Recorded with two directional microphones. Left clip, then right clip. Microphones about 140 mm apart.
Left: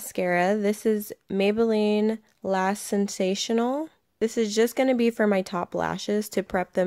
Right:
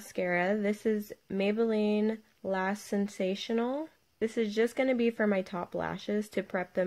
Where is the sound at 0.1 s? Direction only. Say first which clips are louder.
Left 6 dB; 40° left (ahead or behind).